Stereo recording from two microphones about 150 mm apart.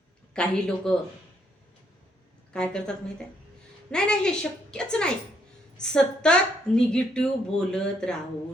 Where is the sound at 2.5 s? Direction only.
5° left (ahead or behind).